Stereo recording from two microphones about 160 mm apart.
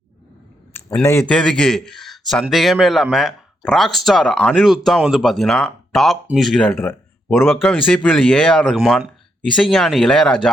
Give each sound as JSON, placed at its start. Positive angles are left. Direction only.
{"t": 1.0, "sound": "a man's voice", "side_deg": 15}
{"t": 6.7, "sound": "a man's voice", "side_deg": 15}